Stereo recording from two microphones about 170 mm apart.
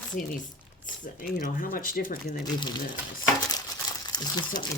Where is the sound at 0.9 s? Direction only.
50° left (ahead or behind).